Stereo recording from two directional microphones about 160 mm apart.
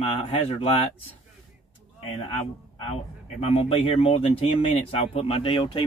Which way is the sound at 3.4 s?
40° left (ahead or behind).